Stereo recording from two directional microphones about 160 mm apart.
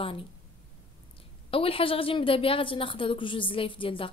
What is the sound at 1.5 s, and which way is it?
A woman's voice, 35° left (ahead or behind).